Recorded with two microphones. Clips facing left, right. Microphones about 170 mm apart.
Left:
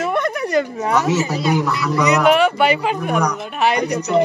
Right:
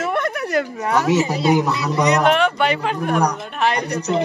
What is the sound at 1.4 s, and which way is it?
Speech, 20° right (ahead or behind).